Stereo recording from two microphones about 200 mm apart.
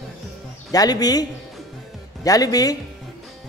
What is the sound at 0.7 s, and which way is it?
Music, 20° left (ahead or behind).